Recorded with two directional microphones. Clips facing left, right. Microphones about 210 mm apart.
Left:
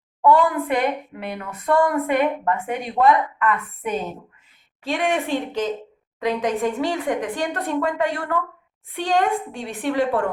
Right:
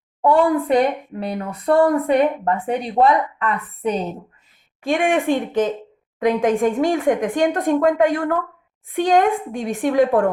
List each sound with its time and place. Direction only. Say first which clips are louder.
0.2 s speech: right 2 dB; 30° right (ahead or behind)
4.8 s speech: right 4 dB; 50° right (ahead or behind)